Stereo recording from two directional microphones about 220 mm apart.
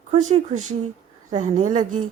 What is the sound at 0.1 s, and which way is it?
Speech, 30° right (ahead or behind).